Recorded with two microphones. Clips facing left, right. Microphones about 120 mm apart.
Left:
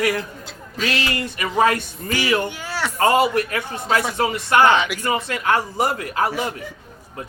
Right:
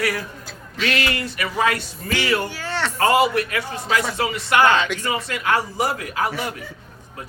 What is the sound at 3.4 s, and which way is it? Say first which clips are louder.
Speech: left 1 dB; 40° left (ahead or behind).